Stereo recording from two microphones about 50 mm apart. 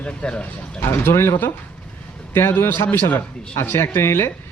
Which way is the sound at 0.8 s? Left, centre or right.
Left.